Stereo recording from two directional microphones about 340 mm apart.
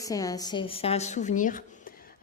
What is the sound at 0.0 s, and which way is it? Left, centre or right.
Speech, centre.